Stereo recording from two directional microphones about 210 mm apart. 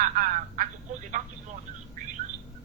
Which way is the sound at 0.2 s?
40° right (ahead or behind).